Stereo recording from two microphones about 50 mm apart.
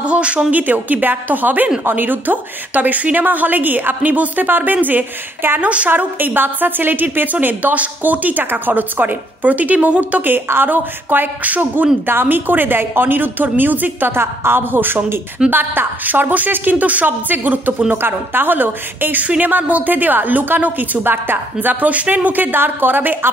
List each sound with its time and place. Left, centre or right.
0.0 s a woman's voice: right
5.6 s speech: right
5.9 s a woman's voice: right
12.1 s a woman's voice: right
18.0 s a woman's voice: right
21.8 s a woman's voice: right